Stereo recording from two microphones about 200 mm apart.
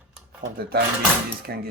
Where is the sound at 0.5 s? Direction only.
50° right (ahead or behind).